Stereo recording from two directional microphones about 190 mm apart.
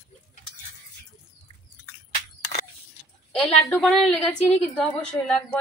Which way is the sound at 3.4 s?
Centre (ahead or behind).